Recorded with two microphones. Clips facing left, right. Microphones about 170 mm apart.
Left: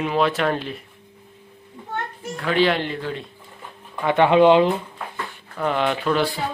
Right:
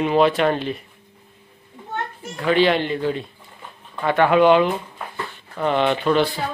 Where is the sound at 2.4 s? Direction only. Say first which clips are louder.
Right 2 dB; centre (ahead or behind).